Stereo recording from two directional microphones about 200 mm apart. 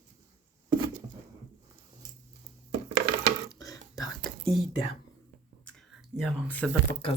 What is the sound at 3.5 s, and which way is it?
Whispering, 15° left (ahead or behind).